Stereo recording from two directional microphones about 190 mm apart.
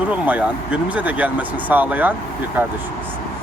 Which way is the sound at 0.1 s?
10° right (ahead or behind).